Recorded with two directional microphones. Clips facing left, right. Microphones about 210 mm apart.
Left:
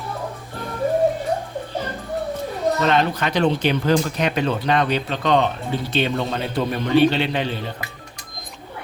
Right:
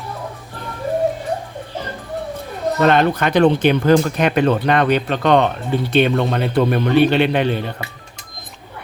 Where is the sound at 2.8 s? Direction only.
55° right (ahead or behind).